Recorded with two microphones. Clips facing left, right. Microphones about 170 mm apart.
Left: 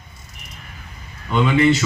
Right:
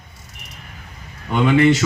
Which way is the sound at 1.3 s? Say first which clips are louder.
Right 2 dB; 55° right (ahead or behind).